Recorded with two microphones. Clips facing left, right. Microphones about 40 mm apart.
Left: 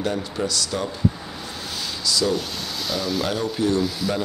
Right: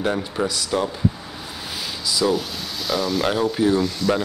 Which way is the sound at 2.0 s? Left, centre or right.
Centre.